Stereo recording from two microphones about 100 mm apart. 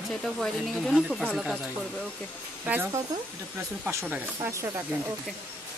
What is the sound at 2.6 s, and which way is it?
Speech, 20° right (ahead or behind).